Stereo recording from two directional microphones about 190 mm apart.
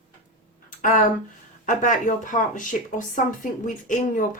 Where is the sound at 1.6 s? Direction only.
45° left (ahead or behind).